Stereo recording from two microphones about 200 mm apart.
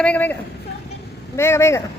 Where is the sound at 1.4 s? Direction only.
15° left (ahead or behind).